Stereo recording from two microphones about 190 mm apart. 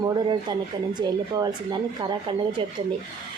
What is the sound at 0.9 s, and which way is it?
Speech, 20° right (ahead or behind).